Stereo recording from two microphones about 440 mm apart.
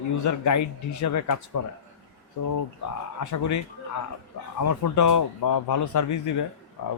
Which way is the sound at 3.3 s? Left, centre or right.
Left.